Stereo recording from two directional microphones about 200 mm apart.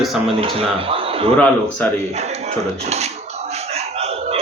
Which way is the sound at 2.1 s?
35° right (ahead or behind).